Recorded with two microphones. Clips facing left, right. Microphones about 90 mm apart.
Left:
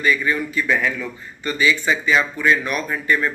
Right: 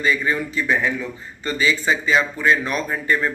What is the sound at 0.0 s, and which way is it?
Speech, 25° right (ahead or behind).